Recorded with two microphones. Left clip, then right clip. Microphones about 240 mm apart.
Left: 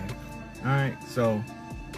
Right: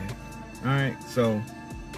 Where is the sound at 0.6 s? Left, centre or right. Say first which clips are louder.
Right 1 dB; right.